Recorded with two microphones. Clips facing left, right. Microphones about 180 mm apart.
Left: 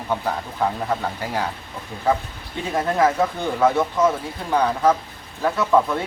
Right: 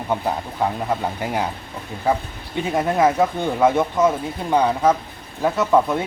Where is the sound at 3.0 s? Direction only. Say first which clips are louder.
Right 2 dB; 20° right (ahead or behind).